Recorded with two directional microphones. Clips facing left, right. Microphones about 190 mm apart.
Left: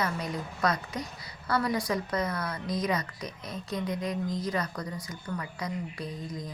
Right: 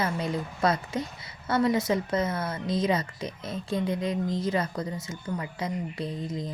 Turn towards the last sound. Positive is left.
turn(degrees=-25)  # may be behind; listen again after turning